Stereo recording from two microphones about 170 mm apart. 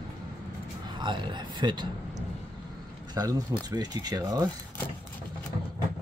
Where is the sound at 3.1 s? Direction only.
25° right (ahead or behind).